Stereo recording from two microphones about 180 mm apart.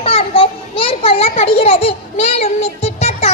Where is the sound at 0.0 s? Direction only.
30° left (ahead or behind).